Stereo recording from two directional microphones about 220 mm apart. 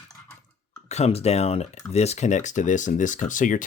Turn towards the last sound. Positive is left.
turn(degrees=35)  # may be behind; listen again after turning